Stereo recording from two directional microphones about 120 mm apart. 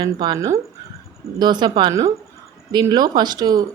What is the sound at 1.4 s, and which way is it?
Speech, 40° right (ahead or behind).